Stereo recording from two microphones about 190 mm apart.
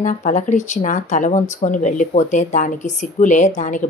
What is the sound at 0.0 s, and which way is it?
A woman's voice, 40° left (ahead or behind).